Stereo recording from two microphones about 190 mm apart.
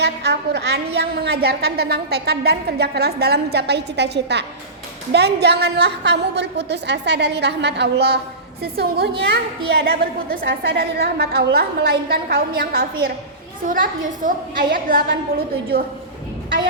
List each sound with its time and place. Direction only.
0.0 s a woman's voice: 60° right (ahead or behind)